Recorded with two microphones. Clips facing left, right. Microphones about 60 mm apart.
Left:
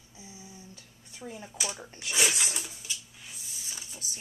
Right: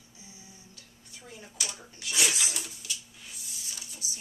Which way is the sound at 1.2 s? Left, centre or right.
Centre.